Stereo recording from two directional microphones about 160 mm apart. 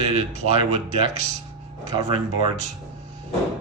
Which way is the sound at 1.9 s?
30° right (ahead or behind).